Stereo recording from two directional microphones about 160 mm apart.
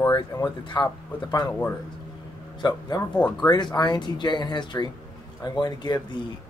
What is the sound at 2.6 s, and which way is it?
Speech, 25° left (ahead or behind).